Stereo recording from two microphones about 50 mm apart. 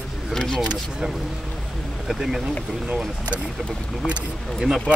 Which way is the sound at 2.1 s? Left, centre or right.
Centre.